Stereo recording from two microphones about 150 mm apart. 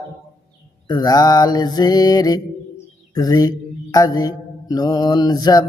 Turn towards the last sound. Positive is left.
turn(degrees=25)  # may be behind; listen again after turning